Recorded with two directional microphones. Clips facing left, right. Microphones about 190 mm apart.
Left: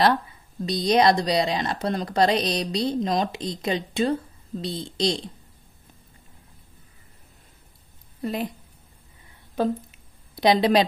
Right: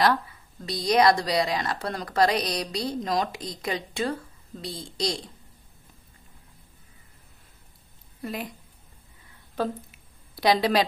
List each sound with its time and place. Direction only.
0.7 s speech: 20° left (ahead or behind)
8.2 s a woman's voice: 25° left (ahead or behind)
9.6 s a sound: 20° left (ahead or behind)